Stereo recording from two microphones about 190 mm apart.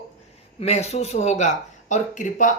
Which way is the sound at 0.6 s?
35° left (ahead or behind).